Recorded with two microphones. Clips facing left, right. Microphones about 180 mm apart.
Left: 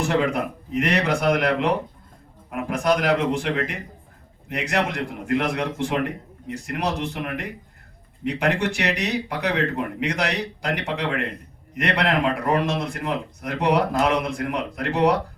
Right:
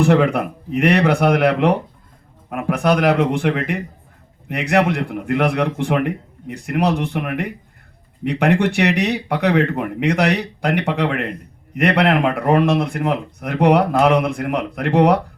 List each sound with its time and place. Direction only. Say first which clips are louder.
0.0 s speech: right 7 dB; 60° right (ahead or behind)